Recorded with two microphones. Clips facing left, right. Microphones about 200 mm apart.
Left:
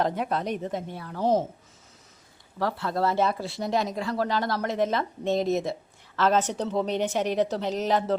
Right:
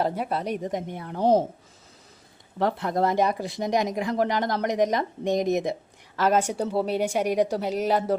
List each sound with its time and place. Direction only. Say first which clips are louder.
0.0 s speech: even; 10° right (ahead or behind); by 1.5 s 30° right (ahead or behind)
2.6 s speech: right 3 dB; 20° right (ahead or behind)